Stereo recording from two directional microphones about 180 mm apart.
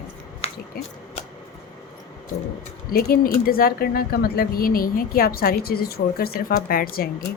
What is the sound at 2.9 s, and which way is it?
Speech, 55° left (ahead or behind).